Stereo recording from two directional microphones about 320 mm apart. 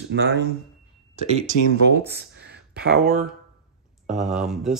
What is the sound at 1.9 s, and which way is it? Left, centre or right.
Speech, right.